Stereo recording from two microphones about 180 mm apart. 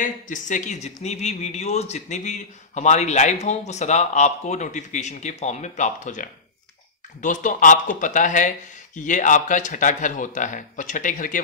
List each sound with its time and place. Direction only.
0.0 s speech: 45° left (ahead or behind)